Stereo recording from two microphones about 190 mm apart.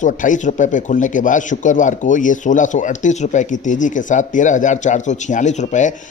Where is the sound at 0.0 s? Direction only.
45° left (ahead or behind).